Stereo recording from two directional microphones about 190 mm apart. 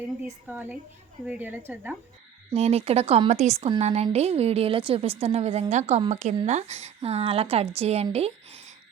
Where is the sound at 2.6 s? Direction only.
35° right (ahead or behind).